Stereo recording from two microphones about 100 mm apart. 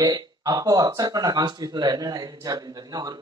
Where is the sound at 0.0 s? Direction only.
40° right (ahead or behind).